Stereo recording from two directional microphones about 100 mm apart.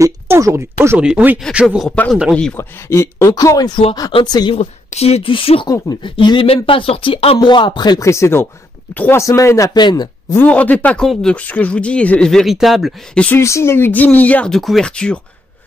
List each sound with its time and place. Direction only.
0.0 s speech: 30° right (ahead or behind)
0.9 s speech: 10° right (ahead or behind)
1.9 s speech: 10° left (ahead or behind)
2.5 s speech: 25° left (ahead or behind); by 4.5 s 50° left (ahead or behind)
4.5 s speech: 90° left; by 7.3 s 65° left (ahead or behind)
7.3 s speech: 50° left (ahead or behind)
8.0 s speech: 30° left (ahead or behind)
9.2 s speech: 30° left (ahead or behind)
9.8 s speech: 45° left (ahead or behind)
10.3 s speech: 15° left (ahead or behind); by 12.9 s centre (ahead or behind)
13.1 s speech: 10° left (ahead or behind)
13.4 s speech: 30° left (ahead or behind)
14.5 s speech: centre (ahead or behind)